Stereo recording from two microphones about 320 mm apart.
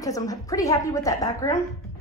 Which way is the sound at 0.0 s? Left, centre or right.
Centre.